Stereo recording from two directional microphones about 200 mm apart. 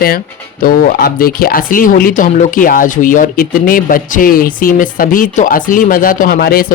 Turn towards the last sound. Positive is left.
turn(degrees=50)  # may be behind; listen again after turning